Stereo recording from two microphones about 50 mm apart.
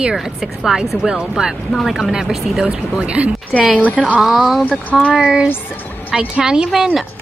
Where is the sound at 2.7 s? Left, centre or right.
Right.